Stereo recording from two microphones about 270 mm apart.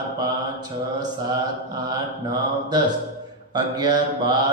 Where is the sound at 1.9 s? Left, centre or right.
Centre.